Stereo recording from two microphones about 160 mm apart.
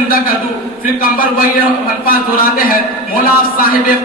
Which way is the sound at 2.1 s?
60° left (ahead or behind).